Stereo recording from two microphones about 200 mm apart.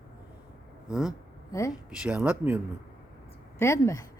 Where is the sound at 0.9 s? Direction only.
5° right (ahead or behind).